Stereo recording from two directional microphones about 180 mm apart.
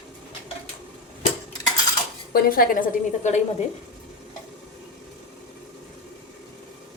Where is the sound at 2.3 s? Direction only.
55° left (ahead or behind).